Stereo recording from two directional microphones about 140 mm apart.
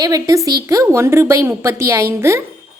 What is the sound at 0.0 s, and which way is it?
A woman's voice, 25° right (ahead or behind).